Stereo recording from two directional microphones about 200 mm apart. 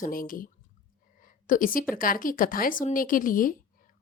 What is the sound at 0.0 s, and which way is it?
A woman's voice, 45° left (ahead or behind).